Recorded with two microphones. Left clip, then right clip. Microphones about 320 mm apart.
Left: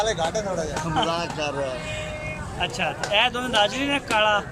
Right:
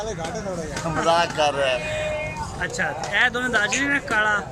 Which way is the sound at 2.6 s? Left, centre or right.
Centre.